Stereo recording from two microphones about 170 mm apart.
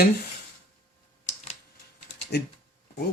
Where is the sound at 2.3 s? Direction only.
75° left (ahead or behind).